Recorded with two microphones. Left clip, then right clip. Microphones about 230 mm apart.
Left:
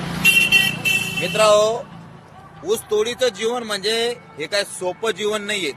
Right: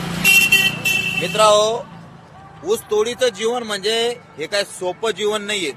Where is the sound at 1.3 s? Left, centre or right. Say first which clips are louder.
Right 1 dB; centre.